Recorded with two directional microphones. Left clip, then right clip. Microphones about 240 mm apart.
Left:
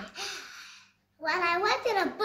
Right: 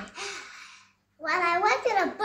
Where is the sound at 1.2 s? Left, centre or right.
Centre.